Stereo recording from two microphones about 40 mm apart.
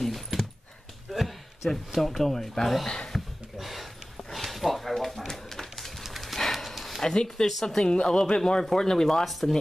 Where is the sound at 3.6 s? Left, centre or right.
Centre.